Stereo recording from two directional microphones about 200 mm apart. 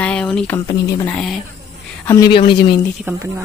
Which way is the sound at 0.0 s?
5° left (ahead or behind).